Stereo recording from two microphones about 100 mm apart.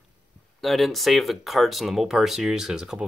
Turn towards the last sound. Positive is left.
turn(degrees=-5)  # may be behind; listen again after turning